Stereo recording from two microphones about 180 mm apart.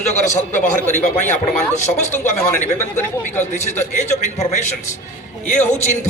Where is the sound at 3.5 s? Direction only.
40° left (ahead or behind).